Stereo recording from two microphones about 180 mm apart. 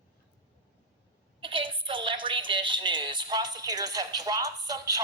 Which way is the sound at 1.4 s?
30° right (ahead or behind).